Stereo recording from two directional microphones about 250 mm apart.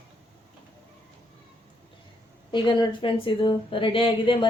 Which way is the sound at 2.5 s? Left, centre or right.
Centre.